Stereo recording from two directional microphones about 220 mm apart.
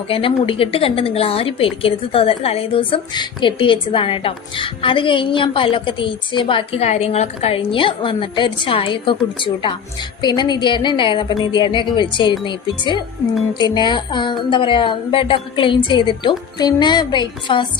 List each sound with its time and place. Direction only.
0.1 s a woman's voice: 25° left (ahead or behind)